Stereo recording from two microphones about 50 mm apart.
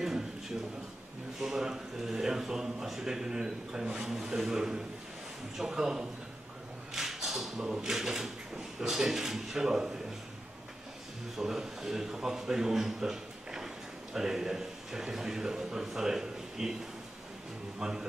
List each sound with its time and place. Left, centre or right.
1.4 s a man's voice: centre
11.3 s a man's voice: centre
17.7 s a man's voice: centre